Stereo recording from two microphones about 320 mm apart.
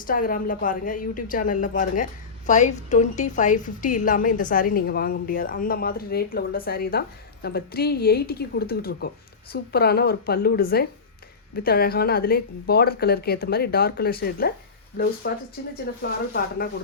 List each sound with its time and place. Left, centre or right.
0.1 s a woman's voice: left